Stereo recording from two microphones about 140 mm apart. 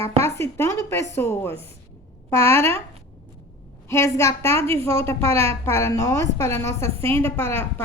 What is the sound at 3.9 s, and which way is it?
A woman's voice, 20° left (ahead or behind).